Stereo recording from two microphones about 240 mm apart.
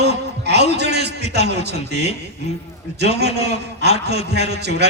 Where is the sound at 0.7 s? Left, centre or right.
Right.